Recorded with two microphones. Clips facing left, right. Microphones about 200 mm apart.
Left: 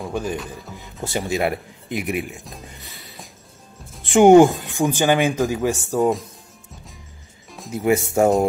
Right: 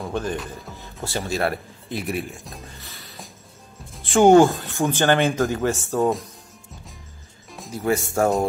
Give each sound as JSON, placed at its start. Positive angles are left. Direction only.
{"t": 0.0, "sound": "speech", "side_deg": 10}
{"t": 1.0, "sound": "speech", "side_deg": 15}
{"t": 2.3, "sound": "speech", "side_deg": 0}
{"t": 2.7, "sound": "music", "side_deg": 15}
{"t": 4.0, "sound": "speech", "side_deg": 15}
{"t": 7.7, "sound": "speech", "side_deg": 20}